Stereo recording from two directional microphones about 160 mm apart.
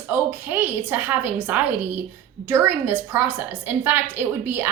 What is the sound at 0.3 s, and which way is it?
A woman's voice, 15° right (ahead or behind).